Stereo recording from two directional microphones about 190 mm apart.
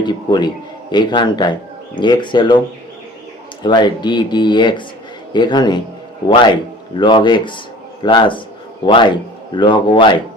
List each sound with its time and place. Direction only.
0.0 s a man's voice: 25° left (ahead or behind)
3.6 s a man's voice: 25° left (ahead or behind)